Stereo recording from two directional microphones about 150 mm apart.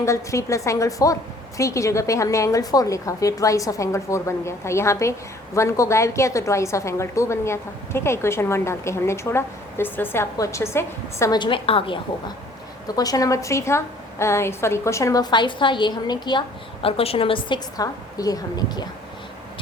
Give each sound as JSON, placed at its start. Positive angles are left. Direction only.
{"t": 0.0, "sound": "a woman's voice", "side_deg": 20}
{"t": 11.3, "sound": "a woman's voice", "side_deg": 35}
{"t": 13.0, "sound": "a woman's voice", "side_deg": 25}
{"t": 16.8, "sound": "a woman's voice", "side_deg": 40}